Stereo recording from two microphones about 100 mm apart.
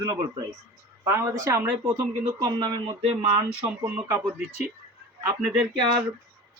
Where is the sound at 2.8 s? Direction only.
85° right; by 3.7 s 65° right (ahead or behind).